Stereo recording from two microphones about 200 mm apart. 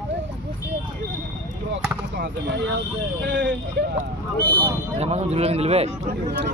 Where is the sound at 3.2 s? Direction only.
65° right (ahead or behind).